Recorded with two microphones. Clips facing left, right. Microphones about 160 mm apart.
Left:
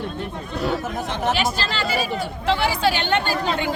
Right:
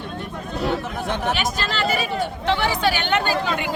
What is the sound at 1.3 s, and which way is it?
Speech, 30° left (ahead or behind).